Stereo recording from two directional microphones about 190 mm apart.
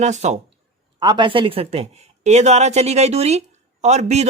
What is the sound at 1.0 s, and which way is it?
A man's voice, 25° right (ahead or behind).